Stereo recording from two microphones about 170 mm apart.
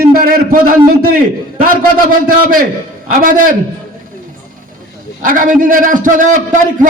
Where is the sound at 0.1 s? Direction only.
60° right (ahead or behind).